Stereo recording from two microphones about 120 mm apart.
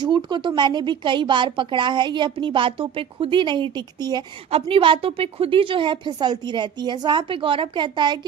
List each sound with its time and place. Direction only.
0.0 s a woman's voice: 40° right (ahead or behind)
4.5 s a woman's voice: 50° right (ahead or behind)